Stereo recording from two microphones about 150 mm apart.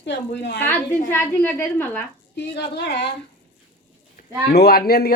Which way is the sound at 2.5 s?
90° left.